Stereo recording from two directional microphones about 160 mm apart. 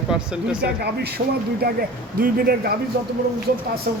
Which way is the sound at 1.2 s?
90° right.